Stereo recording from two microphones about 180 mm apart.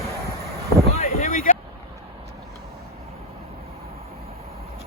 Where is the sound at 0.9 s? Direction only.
40° left (ahead or behind).